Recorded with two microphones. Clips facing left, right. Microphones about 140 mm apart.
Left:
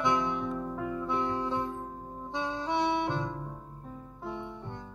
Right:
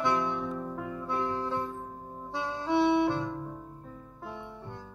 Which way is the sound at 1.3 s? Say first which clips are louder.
Left 1 dB; 15° left (ahead or behind).